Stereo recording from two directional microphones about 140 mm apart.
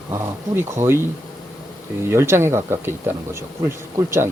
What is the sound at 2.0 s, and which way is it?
Speech, 20° right (ahead or behind).